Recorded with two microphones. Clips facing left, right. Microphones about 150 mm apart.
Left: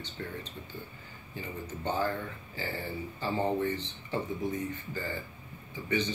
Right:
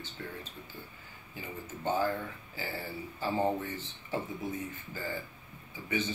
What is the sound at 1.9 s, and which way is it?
Speech, 10° right (ahead or behind).